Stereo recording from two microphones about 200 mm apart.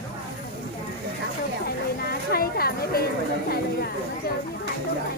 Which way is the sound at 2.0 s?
50° left (ahead or behind).